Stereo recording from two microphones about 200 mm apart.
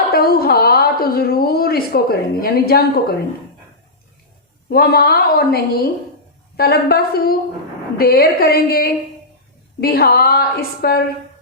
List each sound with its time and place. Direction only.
0.1 s a woman's voice: 50° left (ahead or behind)
4.7 s a woman's voice: 50° left (ahead or behind)